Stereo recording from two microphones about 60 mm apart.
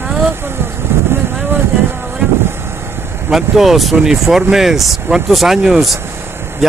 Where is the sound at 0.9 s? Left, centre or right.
Right.